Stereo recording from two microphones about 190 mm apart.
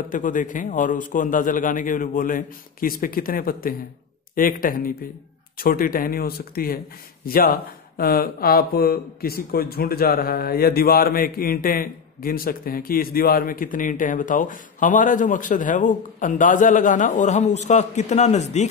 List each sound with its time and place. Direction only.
0.1 s speech: 45° left (ahead or behind)